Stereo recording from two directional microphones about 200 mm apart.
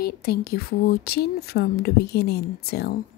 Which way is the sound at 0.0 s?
50° left (ahead or behind).